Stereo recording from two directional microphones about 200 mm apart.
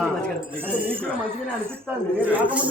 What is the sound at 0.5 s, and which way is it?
A woman's voice, 10° right (ahead or behind).